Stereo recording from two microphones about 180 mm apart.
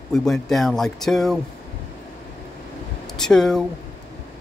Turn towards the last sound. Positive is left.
turn(degrees=5)  # may be behind; listen again after turning